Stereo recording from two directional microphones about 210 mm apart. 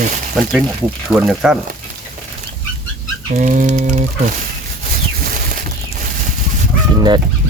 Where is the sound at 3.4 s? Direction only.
35° right (ahead or behind).